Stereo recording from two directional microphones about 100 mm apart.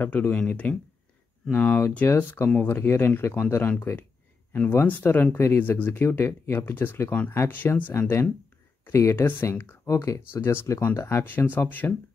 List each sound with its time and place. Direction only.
0.0 s speech: 15° left (ahead or behind)